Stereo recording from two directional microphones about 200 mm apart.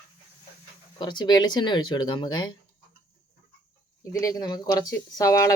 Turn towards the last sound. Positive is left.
turn(degrees=15)  # may be behind; listen again after turning